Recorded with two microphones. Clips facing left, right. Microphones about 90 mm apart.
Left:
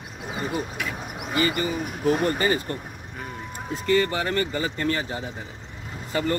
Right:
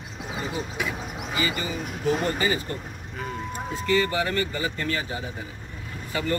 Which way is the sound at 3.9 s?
35° left (ahead or behind).